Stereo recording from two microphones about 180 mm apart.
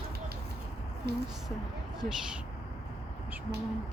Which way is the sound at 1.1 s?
65° right (ahead or behind).